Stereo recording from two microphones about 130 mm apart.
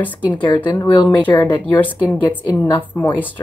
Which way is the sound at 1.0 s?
15° left (ahead or behind).